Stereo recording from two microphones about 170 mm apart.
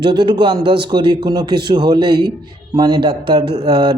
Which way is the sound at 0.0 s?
30° right (ahead or behind).